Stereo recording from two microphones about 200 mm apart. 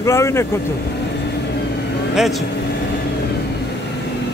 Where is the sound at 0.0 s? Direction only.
15° left (ahead or behind).